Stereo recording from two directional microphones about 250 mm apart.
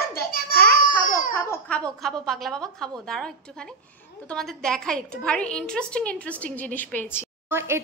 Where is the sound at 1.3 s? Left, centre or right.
Centre.